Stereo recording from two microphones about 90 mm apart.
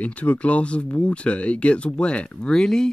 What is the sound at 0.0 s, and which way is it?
Speech, 15° left (ahead or behind).